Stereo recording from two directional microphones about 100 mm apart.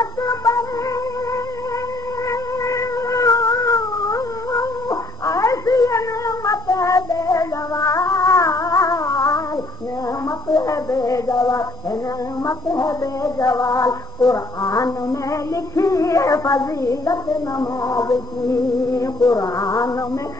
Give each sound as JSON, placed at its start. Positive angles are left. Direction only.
{"t": 0.0, "sound": "music", "side_deg": 35}
{"t": 2.6, "sound": "cat", "side_deg": 30}
{"t": 10.5, "sound": "a sound", "side_deg": 35}
{"t": 12.4, "sound": "female singing", "side_deg": 35}